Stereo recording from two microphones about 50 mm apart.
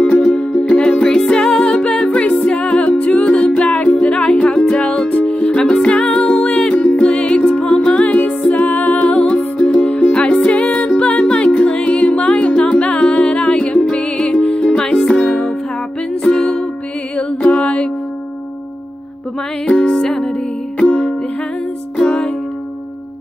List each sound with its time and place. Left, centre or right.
0.4 s music: left
19.7 s music: centre
21.9 s music: centre